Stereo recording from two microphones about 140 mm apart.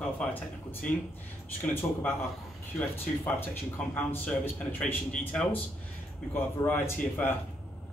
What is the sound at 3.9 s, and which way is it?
Speech, 15° left (ahead or behind).